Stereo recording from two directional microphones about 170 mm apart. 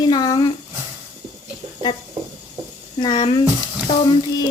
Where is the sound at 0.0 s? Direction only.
25° left (ahead or behind).